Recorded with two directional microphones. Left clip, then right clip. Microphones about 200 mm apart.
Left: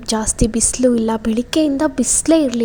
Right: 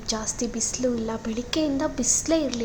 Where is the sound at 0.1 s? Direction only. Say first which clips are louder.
Left 10 dB; 40° left (ahead or behind).